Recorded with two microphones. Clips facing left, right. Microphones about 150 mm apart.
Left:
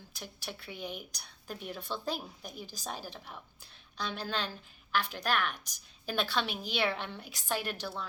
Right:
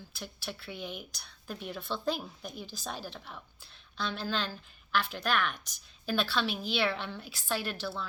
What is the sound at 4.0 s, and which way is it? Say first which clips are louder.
A woman's voice: right 2 dB; 15° left (ahead or behind).